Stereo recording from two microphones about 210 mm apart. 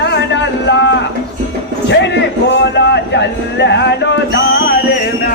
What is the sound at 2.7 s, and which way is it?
Music, 55° left (ahead or behind).